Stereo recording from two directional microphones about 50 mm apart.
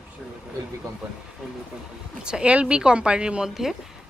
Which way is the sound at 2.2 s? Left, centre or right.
Centre.